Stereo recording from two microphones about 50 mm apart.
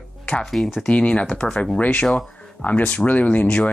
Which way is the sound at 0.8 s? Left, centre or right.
Left.